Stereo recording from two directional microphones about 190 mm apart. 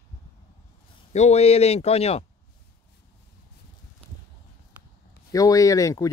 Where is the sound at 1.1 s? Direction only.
35° left (ahead or behind).